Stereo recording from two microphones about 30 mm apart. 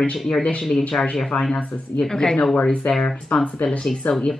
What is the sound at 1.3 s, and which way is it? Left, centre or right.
Speech, left.